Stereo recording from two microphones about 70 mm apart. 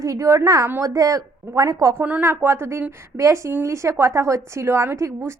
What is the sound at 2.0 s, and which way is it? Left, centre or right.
A woman's voice, right.